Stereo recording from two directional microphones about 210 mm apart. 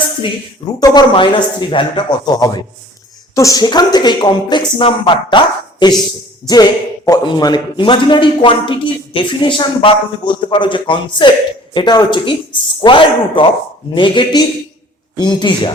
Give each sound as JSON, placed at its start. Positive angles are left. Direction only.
{"t": 0.8, "sound": "speech", "side_deg": 20}